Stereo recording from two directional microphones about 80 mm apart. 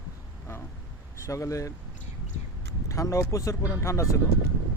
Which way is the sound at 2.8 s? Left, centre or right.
Left.